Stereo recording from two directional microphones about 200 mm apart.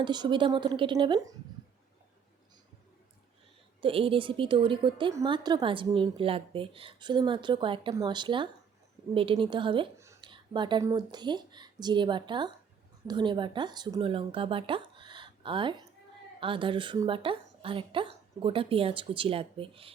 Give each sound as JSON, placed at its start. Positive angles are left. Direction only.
{"t": 0.0, "sound": "a woman's voice", "side_deg": -20}
{"t": 3.8, "sound": "a woman's voice", "side_deg": -25}
{"t": 14.9, "sound": "a sound", "side_deg": -25}
{"t": 16.4, "sound": "a woman's voice", "side_deg": -25}